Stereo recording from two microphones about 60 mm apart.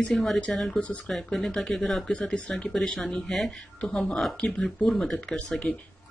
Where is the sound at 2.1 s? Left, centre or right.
Centre.